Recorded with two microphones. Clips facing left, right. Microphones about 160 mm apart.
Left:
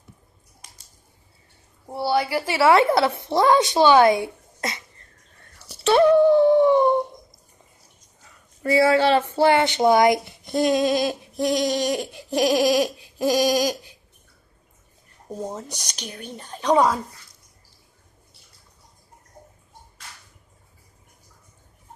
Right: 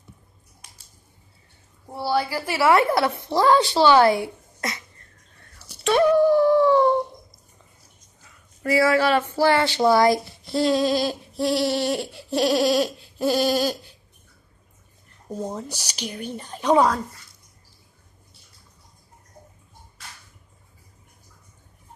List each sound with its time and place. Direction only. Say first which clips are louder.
1.9 s a woman's voice: left 2 dB; 15° left (ahead or behind)
5.9 s dog: left 2 dB; 25° left (ahead or behind)
8.6 s a woman's voice: left 2 dB; 30° left (ahead or behind)
10.6 s a sound: left 1 dB; 20° left (ahead or behind)
15.7 s speech: right 4 dB; 10° right (ahead or behind)
16.7 s speech: even; centre (ahead or behind)